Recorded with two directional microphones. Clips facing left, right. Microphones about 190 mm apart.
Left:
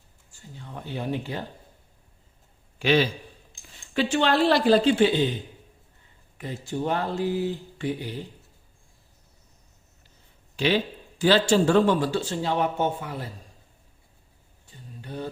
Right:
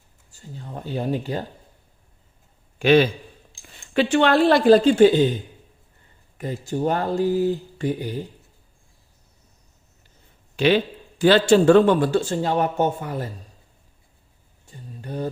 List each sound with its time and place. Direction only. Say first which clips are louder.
0.3 s speech: right 5 dB; 40° right (ahead or behind)
2.7 s a man's voice: right 6 dB; 55° right (ahead or behind)
6.3 s speech: right 4 dB; 45° right (ahead or behind)
11.2 s speech: right 5 dB; 60° right (ahead or behind)
14.7 s a sound: right 5 dB; 45° right (ahead or behind)